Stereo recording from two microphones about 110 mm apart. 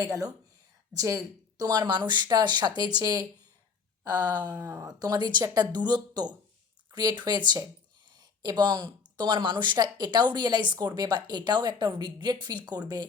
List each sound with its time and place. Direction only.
0.0 s speech: 35° right (ahead or behind)
4.6 s speech: 25° right (ahead or behind)
4.9 s speech: 40° right (ahead or behind)